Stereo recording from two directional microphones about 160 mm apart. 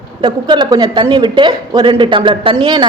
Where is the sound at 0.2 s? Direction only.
30° right (ahead or behind).